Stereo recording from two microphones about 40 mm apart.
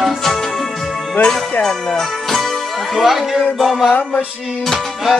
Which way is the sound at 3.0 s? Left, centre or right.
Centre.